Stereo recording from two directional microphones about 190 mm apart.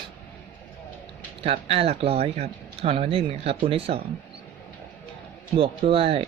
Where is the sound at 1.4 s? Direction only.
30° right (ahead or behind).